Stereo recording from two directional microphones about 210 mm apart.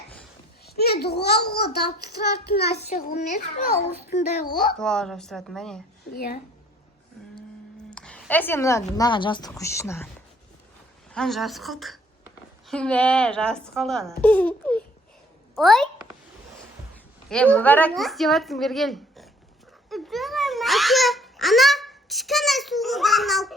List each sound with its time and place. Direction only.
0.6 s a child's voice: 50° left (ahead or behind)
2.9 s a child's voice: 40° left (ahead or behind)
4.8 s a woman's voice: 5° left (ahead or behind)
6.1 s speech: 45° left (ahead or behind)
7.9 s a sound: 5° left (ahead or behind)
9.0 s speech: 20° left (ahead or behind)
11.1 s a woman's voice: centre (ahead or behind)
17.2 s a woman's voice: 5° left (ahead or behind)
19.9 s babbling: centre (ahead or behind)